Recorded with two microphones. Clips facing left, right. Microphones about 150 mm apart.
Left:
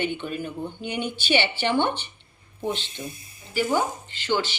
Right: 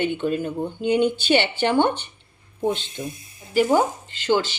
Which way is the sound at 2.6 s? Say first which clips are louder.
Right 5 dB; 45° right (ahead or behind).